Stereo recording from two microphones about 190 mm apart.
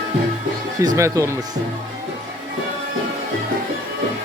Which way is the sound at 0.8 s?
15° right (ahead or behind).